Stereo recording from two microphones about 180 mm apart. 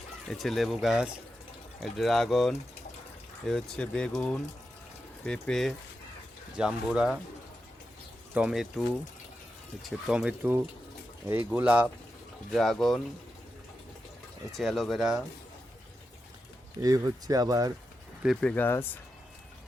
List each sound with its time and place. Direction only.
0.3 s speech: centre (ahead or behind)
5.2 s speech: 5° left (ahead or behind)
8.3 s speech: 5° right (ahead or behind)
9.8 s speech: 5° right (ahead or behind)
14.5 s speech: centre (ahead or behind)
16.8 s speech: 20° right (ahead or behind)
18.2 s speech: centre (ahead or behind)